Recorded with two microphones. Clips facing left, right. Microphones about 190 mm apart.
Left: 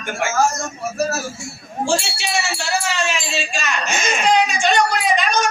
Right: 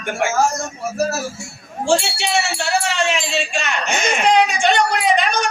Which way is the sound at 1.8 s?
65° right (ahead or behind).